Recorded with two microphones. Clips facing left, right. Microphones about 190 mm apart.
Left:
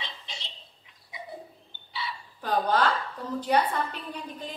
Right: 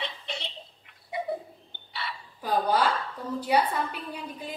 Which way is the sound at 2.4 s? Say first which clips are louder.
Even; 10° right (ahead or behind).